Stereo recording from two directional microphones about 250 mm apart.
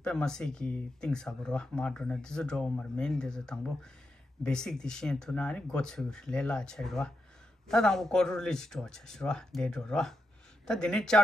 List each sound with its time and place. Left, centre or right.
0.0 s speech: centre